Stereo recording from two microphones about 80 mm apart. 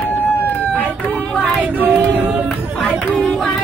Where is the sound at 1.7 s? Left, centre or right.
Right.